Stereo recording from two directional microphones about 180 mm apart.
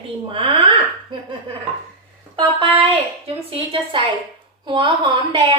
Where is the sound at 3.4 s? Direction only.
30° right (ahead or behind).